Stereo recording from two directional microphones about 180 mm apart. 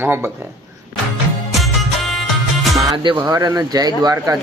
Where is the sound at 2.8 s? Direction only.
25° right (ahead or behind).